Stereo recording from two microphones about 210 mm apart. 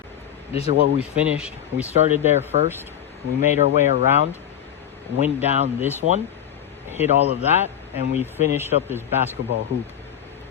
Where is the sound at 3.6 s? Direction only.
30° right (ahead or behind).